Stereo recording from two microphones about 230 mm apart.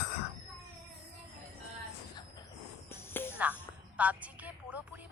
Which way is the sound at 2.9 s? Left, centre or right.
Centre.